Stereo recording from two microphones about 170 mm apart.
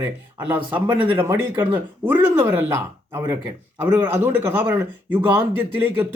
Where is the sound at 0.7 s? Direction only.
25° right (ahead or behind).